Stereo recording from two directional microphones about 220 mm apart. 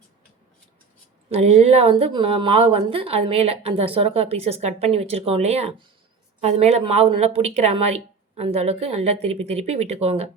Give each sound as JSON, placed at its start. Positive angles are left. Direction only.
{"t": 1.3, "sound": "speech", "side_deg": -30}